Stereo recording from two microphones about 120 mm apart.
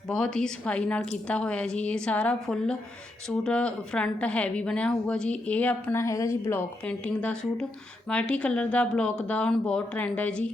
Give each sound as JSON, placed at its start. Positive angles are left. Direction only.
{"t": 0.1, "sound": "a woman's voice", "side_deg": 5}
{"t": 6.0, "sound": "a woman's voice", "side_deg": 25}